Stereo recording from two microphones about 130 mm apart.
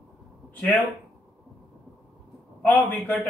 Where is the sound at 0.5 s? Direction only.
10° left (ahead or behind).